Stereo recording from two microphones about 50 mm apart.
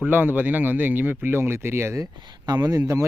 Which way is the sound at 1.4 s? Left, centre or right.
Right.